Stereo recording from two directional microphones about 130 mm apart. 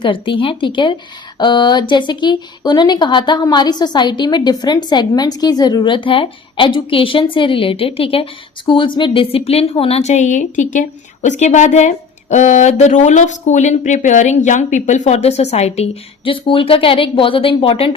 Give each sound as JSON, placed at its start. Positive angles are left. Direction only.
{"t": 0.0, "sound": "speech", "side_deg": 40}